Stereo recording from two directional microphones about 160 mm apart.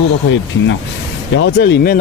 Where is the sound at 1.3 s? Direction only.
90° left.